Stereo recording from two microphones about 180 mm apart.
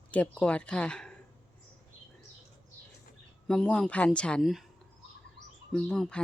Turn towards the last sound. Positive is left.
turn(degrees=5)  # may be behind; listen again after turning